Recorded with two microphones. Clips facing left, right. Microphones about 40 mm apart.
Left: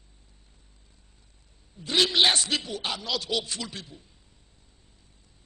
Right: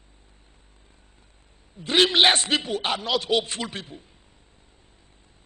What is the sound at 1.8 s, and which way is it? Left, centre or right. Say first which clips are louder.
A man's voice: right 4 dB; right.